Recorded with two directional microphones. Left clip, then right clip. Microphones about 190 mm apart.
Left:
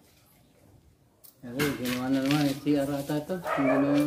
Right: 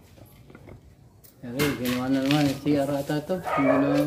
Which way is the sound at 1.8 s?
5° left (ahead or behind).